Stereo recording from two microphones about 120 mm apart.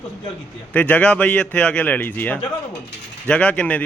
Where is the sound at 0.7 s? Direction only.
10° left (ahead or behind).